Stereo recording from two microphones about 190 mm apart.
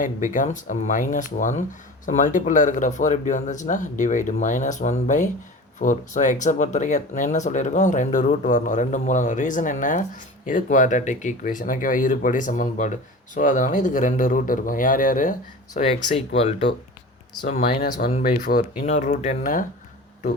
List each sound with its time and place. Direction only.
0.0 s speech: 40° left (ahead or behind)
18.2 s speech: 50° left (ahead or behind)
18.8 s speech: 40° left (ahead or behind)